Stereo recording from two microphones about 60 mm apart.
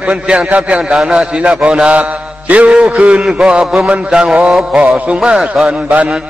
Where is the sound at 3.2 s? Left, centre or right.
Centre.